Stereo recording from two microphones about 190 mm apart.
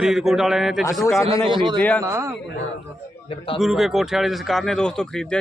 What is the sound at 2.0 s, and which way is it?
Speech, 15° right (ahead or behind).